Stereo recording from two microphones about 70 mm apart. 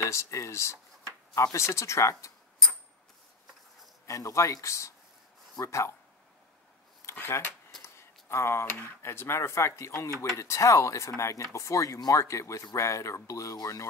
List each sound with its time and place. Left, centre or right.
0.0 s speech: left
4.0 s speech: left
7.2 s speech: left